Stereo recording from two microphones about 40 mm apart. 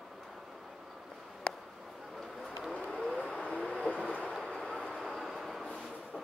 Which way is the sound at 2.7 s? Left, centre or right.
Left.